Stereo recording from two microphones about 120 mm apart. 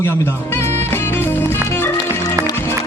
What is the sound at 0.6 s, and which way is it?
Music, 20° left (ahead or behind).